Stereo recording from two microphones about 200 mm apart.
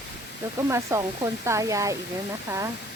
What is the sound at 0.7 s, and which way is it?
Speech, 15° right (ahead or behind).